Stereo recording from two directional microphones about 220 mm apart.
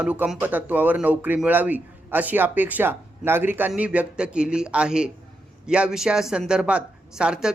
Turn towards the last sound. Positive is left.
turn(degrees=-5)  # may be behind; listen again after turning